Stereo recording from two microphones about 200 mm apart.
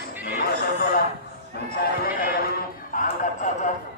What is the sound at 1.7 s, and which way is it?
Music, 45° left (ahead or behind).